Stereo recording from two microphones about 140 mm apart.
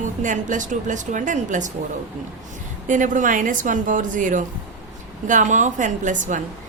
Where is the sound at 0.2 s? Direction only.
65° right (ahead or behind).